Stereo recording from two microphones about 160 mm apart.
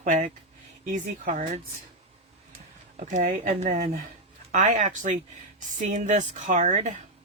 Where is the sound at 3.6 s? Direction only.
40° right (ahead or behind).